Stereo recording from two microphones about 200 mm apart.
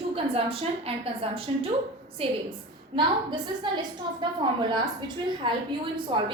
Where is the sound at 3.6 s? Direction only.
25° right (ahead or behind).